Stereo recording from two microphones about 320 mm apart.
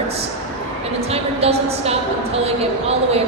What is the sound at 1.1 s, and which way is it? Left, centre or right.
A woman's voice, centre.